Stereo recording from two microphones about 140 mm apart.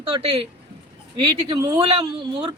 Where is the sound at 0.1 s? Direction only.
45° right (ahead or behind).